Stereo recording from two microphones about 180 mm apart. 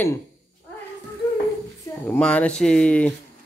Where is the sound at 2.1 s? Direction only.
5° left (ahead or behind).